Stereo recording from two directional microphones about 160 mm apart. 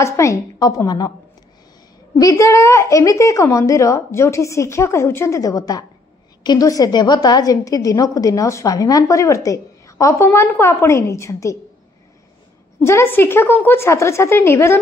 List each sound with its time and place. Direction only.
0.0 s a woman's voice: 20° left (ahead or behind)
2.1 s a woman's voice: 20° left (ahead or behind)
12.8 s a woman's voice: 15° left (ahead or behind)